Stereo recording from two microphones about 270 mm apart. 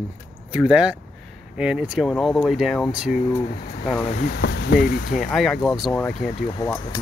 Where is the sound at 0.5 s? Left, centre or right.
Centre.